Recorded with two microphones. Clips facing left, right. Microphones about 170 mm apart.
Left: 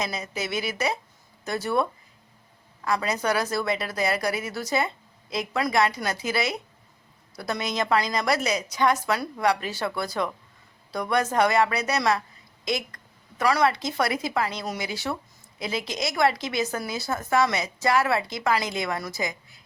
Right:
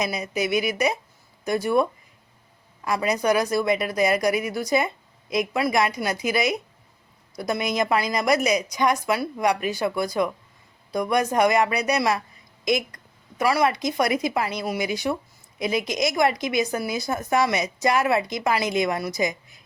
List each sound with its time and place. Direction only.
0.0 s speech: 15° right (ahead or behind)